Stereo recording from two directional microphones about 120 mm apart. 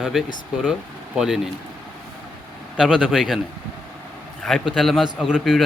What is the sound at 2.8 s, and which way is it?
Speech, 5° right (ahead or behind).